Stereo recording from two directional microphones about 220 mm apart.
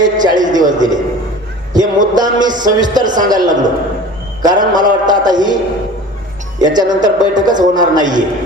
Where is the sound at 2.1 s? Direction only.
20° right (ahead or behind).